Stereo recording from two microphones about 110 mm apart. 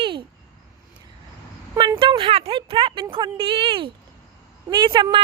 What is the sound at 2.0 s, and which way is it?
Speech, 55° right (ahead or behind).